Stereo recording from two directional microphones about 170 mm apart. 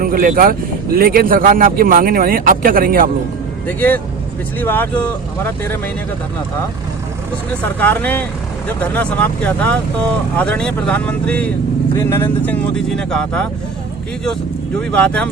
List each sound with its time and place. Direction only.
0.0 s speech: 55° right (ahead or behind)
3.7 s speech: 10° left (ahead or behind)
7.8 s speech: 10° left (ahead or behind)
14.8 s speech: 5° left (ahead or behind)